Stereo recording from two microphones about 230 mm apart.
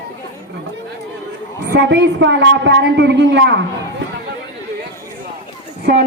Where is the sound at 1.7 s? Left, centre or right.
Right.